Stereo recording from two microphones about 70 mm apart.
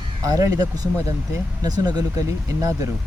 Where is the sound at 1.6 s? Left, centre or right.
Right.